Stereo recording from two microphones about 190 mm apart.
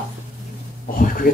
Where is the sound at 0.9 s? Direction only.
45° left (ahead or behind).